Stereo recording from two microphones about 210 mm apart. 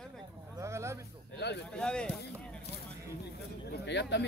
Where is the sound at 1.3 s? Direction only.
50° left (ahead or behind).